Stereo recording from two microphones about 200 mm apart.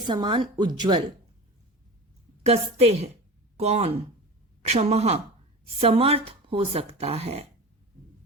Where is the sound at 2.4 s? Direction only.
30° right (ahead or behind).